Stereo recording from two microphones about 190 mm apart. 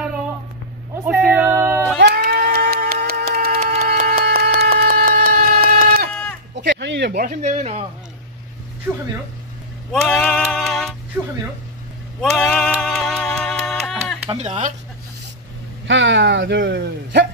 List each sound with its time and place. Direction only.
1.0 s a sound: 10° right (ahead or behind)
2.0 s a sound: 60° right (ahead or behind)
6.6 s speech: 70° right (ahead or behind); by 7.8 s 35° right (ahead or behind)
10.0 s music: centre (ahead or behind)
12.2 s music: centre (ahead or behind)
14.3 s speech: 40° right (ahead or behind)
15.9 s speech: 75° right (ahead or behind)